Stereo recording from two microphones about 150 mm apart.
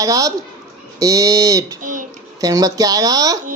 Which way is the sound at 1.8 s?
60° right (ahead or behind).